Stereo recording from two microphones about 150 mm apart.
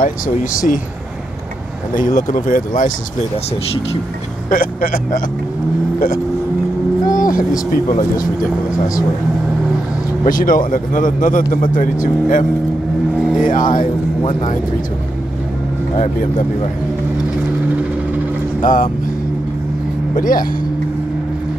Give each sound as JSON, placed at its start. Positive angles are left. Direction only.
{"t": 2.0, "sound": "speech", "side_deg": 60}
{"t": 4.5, "sound": "speech", "side_deg": 70}
{"t": 7.1, "sound": "vehicle", "side_deg": 65}
{"t": 7.7, "sound": "speech", "side_deg": 65}
{"t": 10.2, "sound": "speech", "side_deg": 65}
{"t": 13.1, "sound": "vehicle", "side_deg": -5}
{"t": 13.4, "sound": "speech", "side_deg": 65}
{"t": 16.0, "sound": "speech", "side_deg": 55}
{"t": 18.6, "sound": "speech", "side_deg": 65}
{"t": 20.2, "sound": "speech", "side_deg": 65}